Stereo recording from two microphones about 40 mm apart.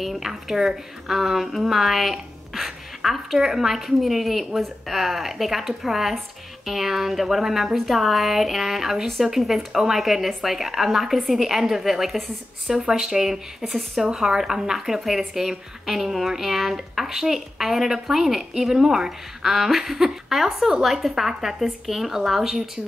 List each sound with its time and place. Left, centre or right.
0.0 s a woman's voice: centre
14.0 s a woman's voice: centre